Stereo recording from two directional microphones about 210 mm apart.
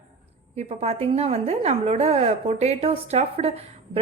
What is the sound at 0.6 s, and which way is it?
A woman's voice, 30° right (ahead or behind).